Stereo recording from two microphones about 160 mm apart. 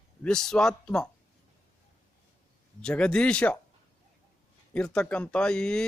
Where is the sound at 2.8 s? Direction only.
5° left (ahead or behind).